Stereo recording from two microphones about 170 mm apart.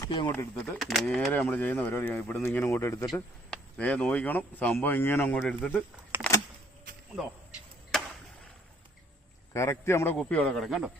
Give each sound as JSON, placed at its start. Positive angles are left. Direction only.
{"t": 0.0, "sound": "speech", "side_deg": 15}
{"t": 0.5, "sound": "speech", "side_deg": 0}
{"t": 6.1, "sound": "a sound", "side_deg": -10}
{"t": 7.9, "sound": "chop", "side_deg": 0}
{"t": 9.5, "sound": "speech", "side_deg": 15}